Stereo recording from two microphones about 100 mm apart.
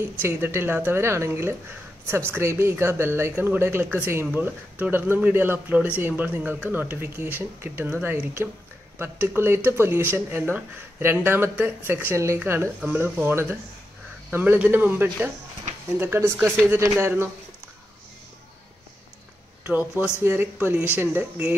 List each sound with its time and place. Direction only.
0.2 s speech: 20° right (ahead or behind)
19.6 s speech: 15° right (ahead or behind)